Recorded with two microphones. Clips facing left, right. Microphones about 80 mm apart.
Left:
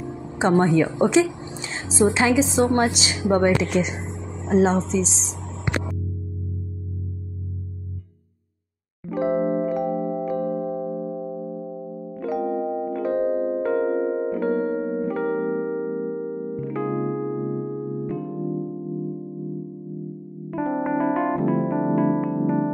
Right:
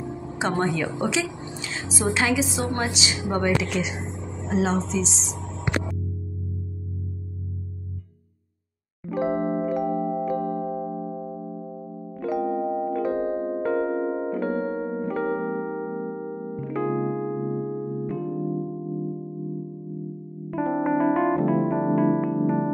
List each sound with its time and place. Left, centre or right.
0.9 s a woman's voice: left
1.6 s a woman's voice: left
2.8 s a woman's voice: left
9.1 s music: centre
20.5 s electric piano: centre